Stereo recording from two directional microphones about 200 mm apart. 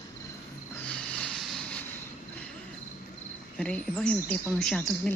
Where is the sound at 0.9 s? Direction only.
5° left (ahead or behind).